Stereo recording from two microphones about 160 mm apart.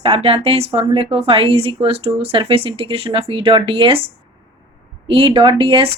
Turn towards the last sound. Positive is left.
turn(degrees=-35)  # may be behind; listen again after turning